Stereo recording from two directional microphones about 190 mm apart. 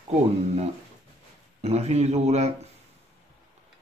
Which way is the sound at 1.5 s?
35° right (ahead or behind).